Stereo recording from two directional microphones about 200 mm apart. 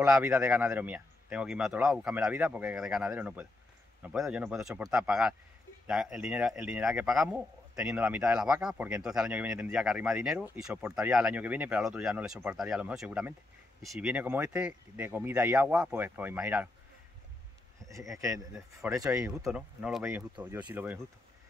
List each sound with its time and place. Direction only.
0.0 s speech: 5° right (ahead or behind)
18.3 s speech: centre (ahead or behind)
18.9 s speech: 15° right (ahead or behind)
19.4 s speech: 5° right (ahead or behind)